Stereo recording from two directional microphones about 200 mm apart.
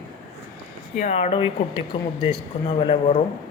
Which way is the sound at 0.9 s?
35° left (ahead or behind).